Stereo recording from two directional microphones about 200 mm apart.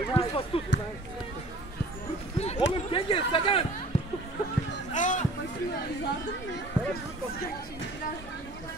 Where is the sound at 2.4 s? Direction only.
30° left (ahead or behind).